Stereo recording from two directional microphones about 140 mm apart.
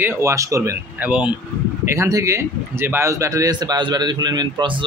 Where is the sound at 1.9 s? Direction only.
25° right (ahead or behind).